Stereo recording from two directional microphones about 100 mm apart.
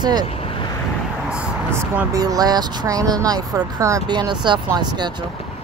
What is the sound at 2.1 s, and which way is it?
Speech, 40° right (ahead or behind).